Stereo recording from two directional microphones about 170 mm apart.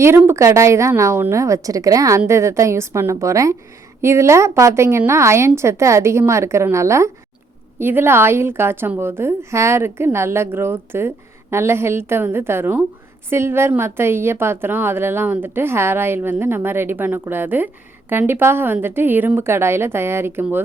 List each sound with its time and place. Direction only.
0.0 s a woman's voice: 15° right (ahead or behind)